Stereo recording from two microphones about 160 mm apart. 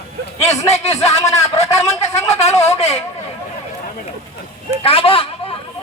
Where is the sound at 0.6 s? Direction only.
45° left (ahead or behind).